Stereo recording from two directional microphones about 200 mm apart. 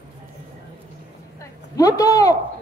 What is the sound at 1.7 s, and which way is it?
Speech, 15° left (ahead or behind).